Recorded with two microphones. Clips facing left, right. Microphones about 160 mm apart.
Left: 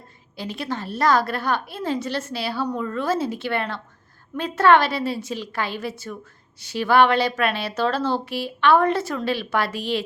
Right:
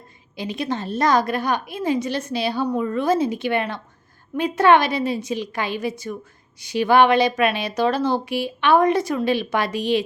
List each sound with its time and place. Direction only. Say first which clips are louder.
0.3 s a woman's voice: right 3 dB; 20° right (ahead or behind)